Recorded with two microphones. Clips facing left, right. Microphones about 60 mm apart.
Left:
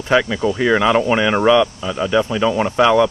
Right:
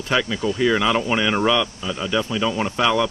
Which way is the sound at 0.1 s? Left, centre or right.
Left.